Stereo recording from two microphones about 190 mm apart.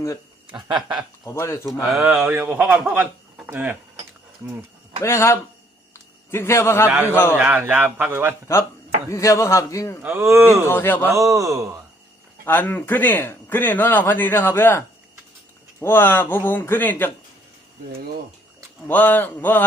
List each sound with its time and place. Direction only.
1.2 s a man's voice: 15° left (ahead or behind)
2.0 s speech: 10° right (ahead or behind)
5.0 s a man's voice: 15° left (ahead or behind)
6.8 s speech: 10° right (ahead or behind)
7.1 s a man's voice: 10° left (ahead or behind)
7.3 s speech: 10° right (ahead or behind)
9.0 s a man's voice: 15° left (ahead or behind)
10.0 s speech: 10° right (ahead or behind)
10.7 s a man's voice: 10° left (ahead or behind)
11.1 s speech: 15° right (ahead or behind)
12.5 s a man's voice: 10° left (ahead or behind)
18.9 s a man's voice: 10° left (ahead or behind)